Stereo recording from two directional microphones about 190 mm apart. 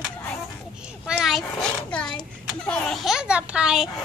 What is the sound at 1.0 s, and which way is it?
A child's voice, centre (ahead or behind).